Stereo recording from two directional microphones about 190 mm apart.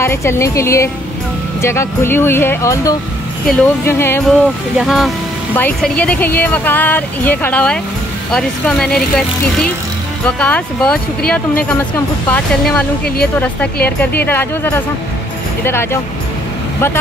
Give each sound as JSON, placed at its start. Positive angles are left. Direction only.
{"t": 0.0, "sound": "speech", "side_deg": 15}
{"t": 4.7, "sound": "speech", "side_deg": 0}